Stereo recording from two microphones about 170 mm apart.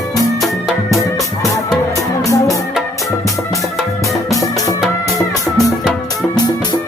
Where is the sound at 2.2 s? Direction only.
20° left (ahead or behind).